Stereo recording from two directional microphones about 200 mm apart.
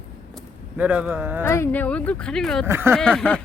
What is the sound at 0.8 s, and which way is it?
Speech, 5° right (ahead or behind).